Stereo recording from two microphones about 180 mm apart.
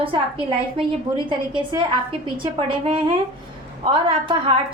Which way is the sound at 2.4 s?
30° right (ahead or behind).